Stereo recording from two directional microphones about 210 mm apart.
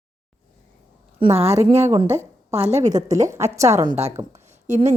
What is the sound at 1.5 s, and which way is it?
A woman's voice, 30° right (ahead or behind).